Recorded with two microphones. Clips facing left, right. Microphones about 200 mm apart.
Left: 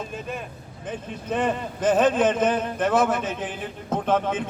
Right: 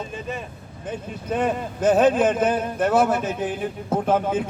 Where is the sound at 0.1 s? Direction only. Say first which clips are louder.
Right 1 dB; centre (ahead or behind).